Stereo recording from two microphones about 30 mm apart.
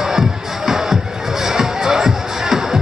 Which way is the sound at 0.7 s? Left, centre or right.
Centre.